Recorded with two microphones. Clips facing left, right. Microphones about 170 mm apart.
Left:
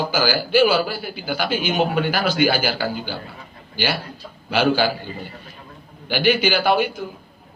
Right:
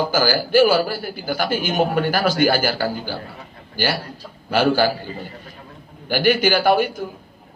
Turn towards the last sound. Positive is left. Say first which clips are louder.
# right 2 dB
turn(degrees=-50)  # may be behind; listen again after turning